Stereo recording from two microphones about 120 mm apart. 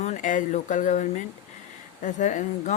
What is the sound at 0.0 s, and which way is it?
Speech, 90° left.